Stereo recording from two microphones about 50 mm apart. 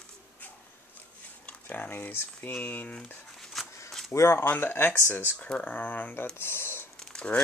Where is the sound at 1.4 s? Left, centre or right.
Left.